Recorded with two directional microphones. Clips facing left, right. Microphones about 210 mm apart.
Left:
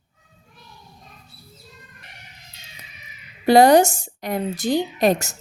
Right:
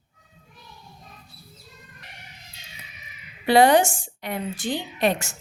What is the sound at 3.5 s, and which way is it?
Speech, 40° left (ahead or behind).